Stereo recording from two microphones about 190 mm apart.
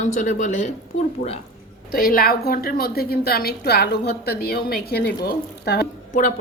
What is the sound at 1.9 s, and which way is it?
A woman's voice, 50° left (ahead or behind).